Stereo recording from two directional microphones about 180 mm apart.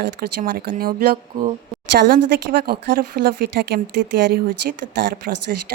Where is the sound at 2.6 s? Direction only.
60° right (ahead or behind).